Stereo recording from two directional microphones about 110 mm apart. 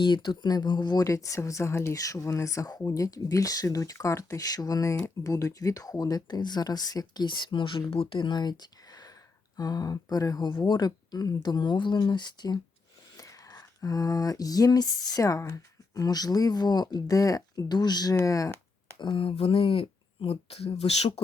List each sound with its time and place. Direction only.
0.0 s speech: 45° left (ahead or behind)
7.9 s speech: 65° left (ahead or behind)
8.2 s speech: 40° left (ahead or behind)
13.1 s a sound: 30° left (ahead or behind)
16.0 s speech: 35° left (ahead or behind)
18.2 s a sound: 30° left (ahead or behind)
18.9 s speech: 50° left (ahead or behind); by 21.1 s 70° left (ahead or behind)